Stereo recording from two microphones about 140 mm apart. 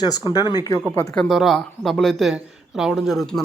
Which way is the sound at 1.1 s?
5° left (ahead or behind).